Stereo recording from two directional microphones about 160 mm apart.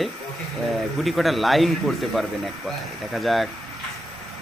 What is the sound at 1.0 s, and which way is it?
Speech, centre (ahead or behind).